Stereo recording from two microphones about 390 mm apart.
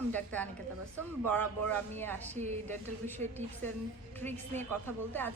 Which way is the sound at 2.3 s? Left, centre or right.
Centre.